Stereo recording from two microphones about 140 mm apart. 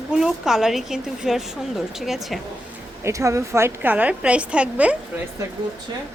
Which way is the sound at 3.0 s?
20° right (ahead or behind).